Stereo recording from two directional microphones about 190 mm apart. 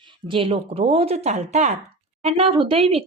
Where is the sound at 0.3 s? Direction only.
30° right (ahead or behind).